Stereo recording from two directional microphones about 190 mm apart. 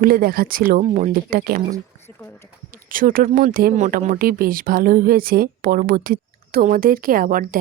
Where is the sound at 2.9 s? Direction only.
45° right (ahead or behind).